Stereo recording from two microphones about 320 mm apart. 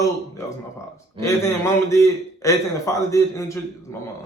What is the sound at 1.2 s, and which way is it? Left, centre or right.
A man's voice, centre.